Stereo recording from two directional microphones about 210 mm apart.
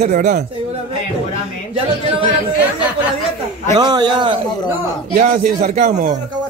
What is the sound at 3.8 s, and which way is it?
Speech, 20° right (ahead or behind).